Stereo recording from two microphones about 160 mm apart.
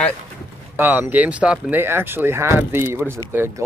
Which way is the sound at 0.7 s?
10° right (ahead or behind).